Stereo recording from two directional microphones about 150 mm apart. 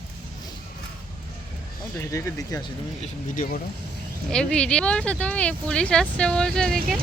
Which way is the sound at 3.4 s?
65° left (ahead or behind).